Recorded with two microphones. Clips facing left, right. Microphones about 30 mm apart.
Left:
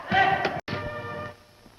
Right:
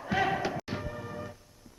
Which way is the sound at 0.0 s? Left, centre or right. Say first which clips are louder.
Left 7 dB; left.